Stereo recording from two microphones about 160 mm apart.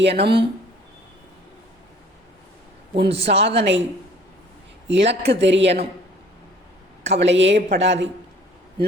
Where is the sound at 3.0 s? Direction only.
40° right (ahead or behind).